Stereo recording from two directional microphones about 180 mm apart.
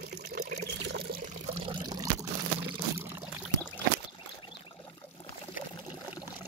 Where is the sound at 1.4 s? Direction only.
30° right (ahead or behind).